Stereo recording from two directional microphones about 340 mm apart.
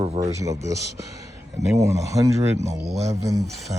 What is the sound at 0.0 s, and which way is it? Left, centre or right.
Speech, centre.